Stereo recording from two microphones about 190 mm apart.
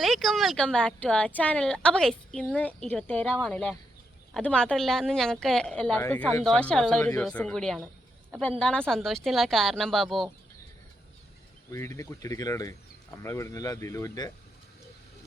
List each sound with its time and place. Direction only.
0.0 s a woman's voice: centre (ahead or behind)
11.7 s speech: 15° left (ahead or behind)